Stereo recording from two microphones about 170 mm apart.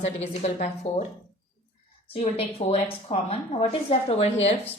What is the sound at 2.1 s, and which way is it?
A woman's voice, 35° left (ahead or behind).